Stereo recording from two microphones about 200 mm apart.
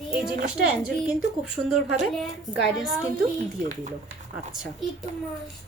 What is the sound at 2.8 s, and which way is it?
Speech, centre (ahead or behind).